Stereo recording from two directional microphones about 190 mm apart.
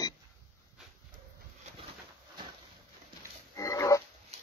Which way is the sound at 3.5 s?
15° left (ahead or behind).